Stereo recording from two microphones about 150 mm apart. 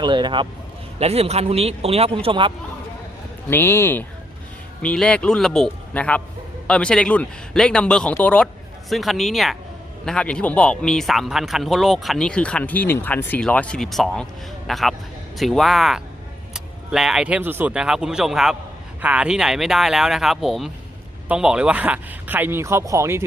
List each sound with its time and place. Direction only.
0.0 s speech: 30° right (ahead or behind)
0.9 s a man's voice: 45° right (ahead or behind)
3.5 s a man's voice: 15° left (ahead or behind); by 23.2 s 20° right (ahead or behind)